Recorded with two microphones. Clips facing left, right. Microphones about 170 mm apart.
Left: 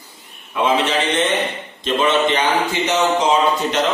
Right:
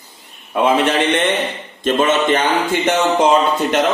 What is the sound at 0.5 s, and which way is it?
Speech, 50° right (ahead or behind).